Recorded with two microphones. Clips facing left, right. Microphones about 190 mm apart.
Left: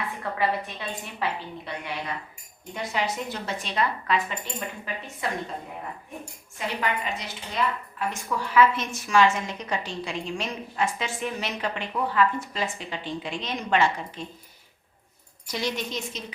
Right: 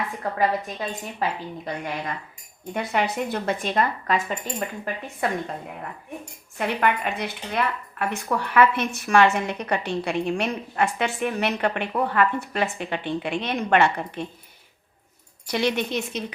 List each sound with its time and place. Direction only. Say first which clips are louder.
0.2 s a woman's voice: right 3 dB; 40° right (ahead or behind)
2.7 s a woman's voice: right 4 dB; 60° right (ahead or behind)
6.6 s a woman's voice: right 5 dB; 60° right (ahead or behind)
15.4 s a woman's voice: right 6 dB; 60° right (ahead or behind)